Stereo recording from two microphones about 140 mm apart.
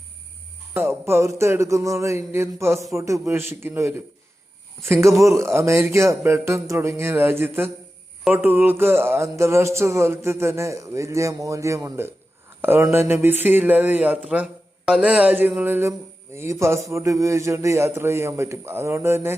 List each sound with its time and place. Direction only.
0.7 s speech: 15° right (ahead or behind)